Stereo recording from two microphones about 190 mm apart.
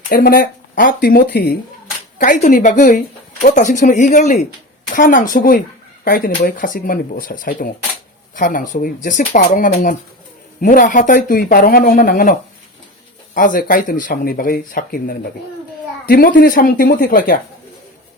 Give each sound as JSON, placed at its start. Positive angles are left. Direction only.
{"t": 0.1, "sound": "speech", "side_deg": 50}
{"t": 2.1, "sound": "speech", "side_deg": 45}